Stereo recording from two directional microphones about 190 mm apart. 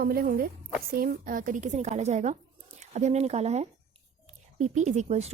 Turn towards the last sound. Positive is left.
turn(degrees=-35)  # may be behind; listen again after turning